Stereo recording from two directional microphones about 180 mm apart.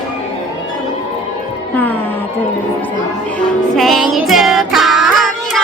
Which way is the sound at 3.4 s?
Centre (ahead or behind).